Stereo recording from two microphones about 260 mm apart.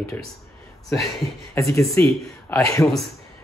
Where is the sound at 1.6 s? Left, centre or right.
Centre.